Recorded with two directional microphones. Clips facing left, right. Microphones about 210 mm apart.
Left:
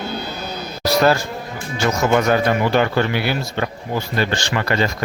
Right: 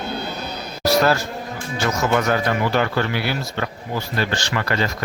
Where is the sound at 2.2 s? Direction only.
20° left (ahead or behind).